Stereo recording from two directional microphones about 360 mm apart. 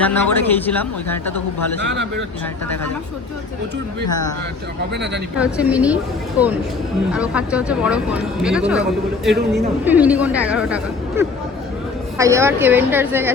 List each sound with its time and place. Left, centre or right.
0.0 s speech: centre
5.4 s speech: centre
9.3 s a woman's voice: right
9.8 s speech: centre
12.1 s speech: centre